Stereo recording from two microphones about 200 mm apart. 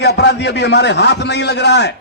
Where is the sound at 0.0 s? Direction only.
55° left (ahead or behind).